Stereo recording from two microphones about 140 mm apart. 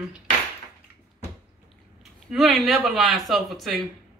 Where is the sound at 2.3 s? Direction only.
Centre (ahead or behind).